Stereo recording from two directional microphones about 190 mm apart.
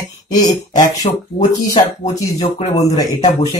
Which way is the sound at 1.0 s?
35° left (ahead or behind).